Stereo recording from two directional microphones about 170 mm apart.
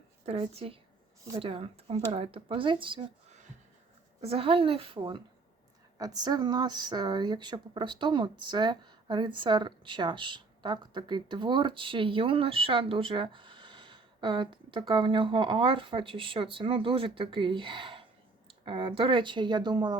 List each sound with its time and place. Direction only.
0.3 s speech: 35° right (ahead or behind)